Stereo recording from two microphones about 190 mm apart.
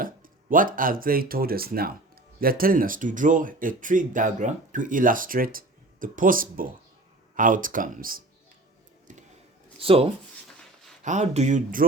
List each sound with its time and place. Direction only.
0.0 s speech: 45° right (ahead or behind)
9.8 s speech: 30° right (ahead or behind)